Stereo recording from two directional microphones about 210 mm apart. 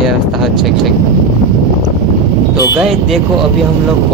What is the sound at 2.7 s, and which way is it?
Speech, centre (ahead or behind).